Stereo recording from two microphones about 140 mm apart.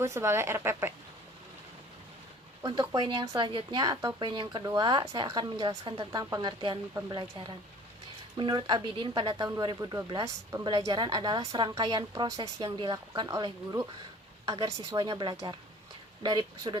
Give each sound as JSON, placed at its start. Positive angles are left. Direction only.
{"t": 0.0, "sound": "a woman's voice", "side_deg": -20}
{"t": 2.9, "sound": "a woman's voice", "side_deg": -30}